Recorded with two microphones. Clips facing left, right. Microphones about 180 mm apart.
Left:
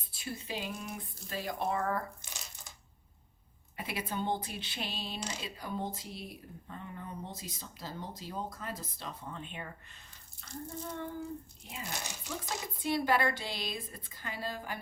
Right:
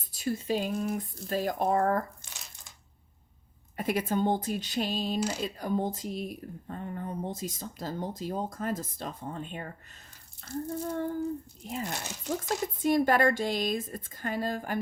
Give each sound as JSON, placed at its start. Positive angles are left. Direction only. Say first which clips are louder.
{"t": 0.0, "sound": "speech", "louder": "right 10 dB", "side_deg": -45}
{"t": 3.8, "sound": "speech", "louder": "right 9 dB", "side_deg": -45}